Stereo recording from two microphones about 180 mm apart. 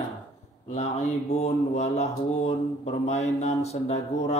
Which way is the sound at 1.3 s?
35° left (ahead or behind).